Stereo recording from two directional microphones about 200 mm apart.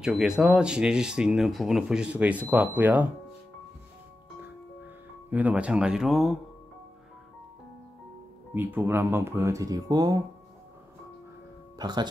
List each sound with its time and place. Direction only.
0.0 s speech: 5° right (ahead or behind)
5.3 s speech: 5° right (ahead or behind)
8.5 s speech: 10° right (ahead or behind)
11.8 s speech: 20° right (ahead or behind)